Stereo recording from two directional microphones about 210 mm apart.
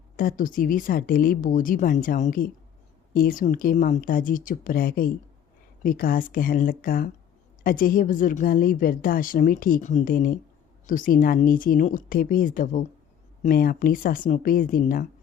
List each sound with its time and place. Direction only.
0.2 s a woman's voice: 40° left (ahead or behind)